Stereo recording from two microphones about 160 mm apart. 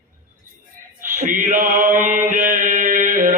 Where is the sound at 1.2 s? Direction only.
50° right (ahead or behind).